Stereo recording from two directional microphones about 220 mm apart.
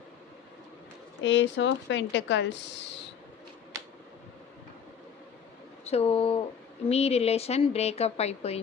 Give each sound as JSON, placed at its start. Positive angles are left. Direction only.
{"t": 1.2, "sound": "speech", "side_deg": 55}
{"t": 5.8, "sound": "speech", "side_deg": 30}